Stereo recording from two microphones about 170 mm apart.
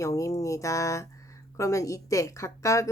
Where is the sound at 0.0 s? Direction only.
20° left (ahead or behind).